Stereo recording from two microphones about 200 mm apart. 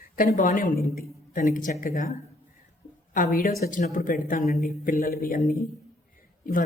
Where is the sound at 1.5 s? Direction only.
40° left (ahead or behind).